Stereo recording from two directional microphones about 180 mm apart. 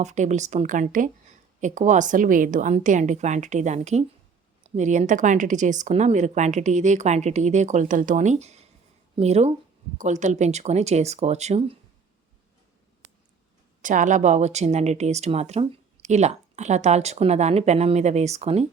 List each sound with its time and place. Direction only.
0.0 s a woman's voice: 40° right (ahead or behind)
13.8 s speech: 45° right (ahead or behind)